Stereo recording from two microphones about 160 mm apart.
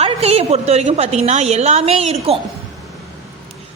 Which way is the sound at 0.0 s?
40° right (ahead or behind).